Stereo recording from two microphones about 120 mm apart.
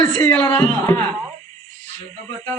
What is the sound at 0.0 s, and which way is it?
Speech, 20° left (ahead or behind).